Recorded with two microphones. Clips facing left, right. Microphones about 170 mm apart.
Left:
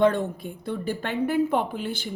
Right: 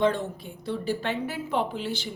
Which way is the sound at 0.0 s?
55° left (ahead or behind).